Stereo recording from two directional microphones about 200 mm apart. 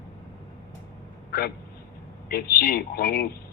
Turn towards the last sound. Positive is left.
turn(degrees=50)  # may be behind; listen again after turning